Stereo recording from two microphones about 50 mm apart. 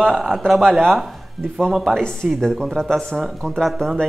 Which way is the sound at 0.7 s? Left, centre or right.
Centre.